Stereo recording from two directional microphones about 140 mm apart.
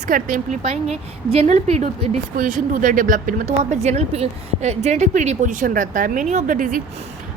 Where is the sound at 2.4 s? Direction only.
65° right (ahead or behind).